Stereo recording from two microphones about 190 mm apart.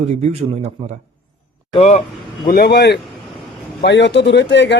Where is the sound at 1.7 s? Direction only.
35° left (ahead or behind).